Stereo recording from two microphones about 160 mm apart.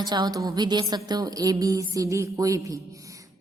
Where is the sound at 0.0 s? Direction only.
25° right (ahead or behind).